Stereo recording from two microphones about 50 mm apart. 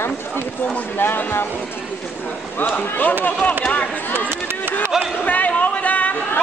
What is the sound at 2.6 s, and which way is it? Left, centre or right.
Speech, left.